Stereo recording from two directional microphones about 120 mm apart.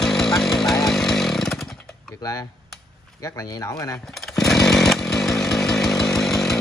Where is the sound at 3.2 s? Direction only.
30° left (ahead or behind).